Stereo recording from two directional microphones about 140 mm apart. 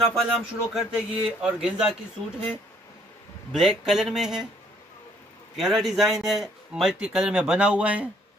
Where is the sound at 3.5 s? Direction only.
Centre (ahead or behind).